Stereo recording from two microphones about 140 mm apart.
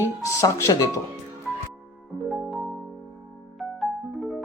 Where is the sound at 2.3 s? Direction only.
5° right (ahead or behind).